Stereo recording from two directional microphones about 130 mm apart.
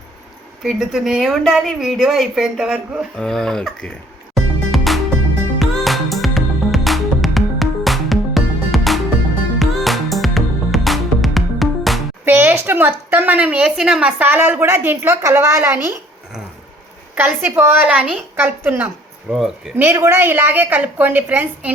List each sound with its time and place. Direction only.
0.6 s a woman's voice: 5° right (ahead or behind)
4.7 s music: centre (ahead or behind)
12.2 s a woman's voice: 15° right (ahead or behind)
17.2 s a woman's voice: 15° right (ahead or behind)
19.3 s a woman's voice: 5° right (ahead or behind)
19.7 s a woman's voice: 15° right (ahead or behind)